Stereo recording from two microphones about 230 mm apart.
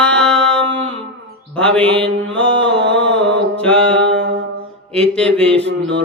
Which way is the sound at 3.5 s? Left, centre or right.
Centre.